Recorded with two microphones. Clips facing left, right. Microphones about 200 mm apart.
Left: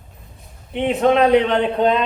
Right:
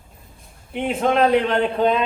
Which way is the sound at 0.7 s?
Centre (ahead or behind).